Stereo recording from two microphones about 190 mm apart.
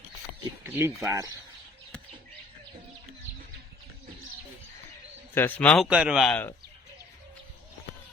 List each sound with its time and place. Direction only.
0.6 s speech: 15° right (ahead or behind)
5.3 s speech: 10° left (ahead or behind)